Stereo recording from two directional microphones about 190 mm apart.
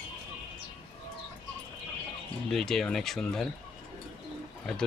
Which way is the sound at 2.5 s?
Centre (ahead or behind).